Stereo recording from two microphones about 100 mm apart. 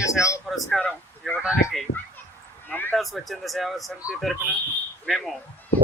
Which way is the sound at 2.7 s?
20° left (ahead or behind).